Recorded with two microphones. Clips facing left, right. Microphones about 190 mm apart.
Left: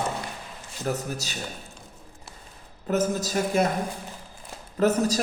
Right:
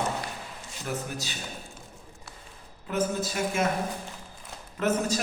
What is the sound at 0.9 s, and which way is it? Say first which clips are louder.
Speech: left 5 dB; 40° left (ahead or behind).